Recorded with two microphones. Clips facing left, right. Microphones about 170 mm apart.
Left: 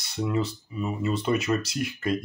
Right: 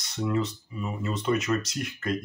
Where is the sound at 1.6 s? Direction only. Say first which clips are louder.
Left 4 dB; 10° left (ahead or behind).